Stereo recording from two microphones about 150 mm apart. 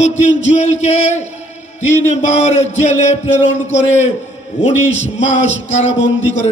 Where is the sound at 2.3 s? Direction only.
45° left (ahead or behind).